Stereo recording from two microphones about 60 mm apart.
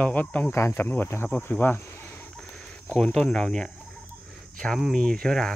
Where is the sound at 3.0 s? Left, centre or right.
Centre.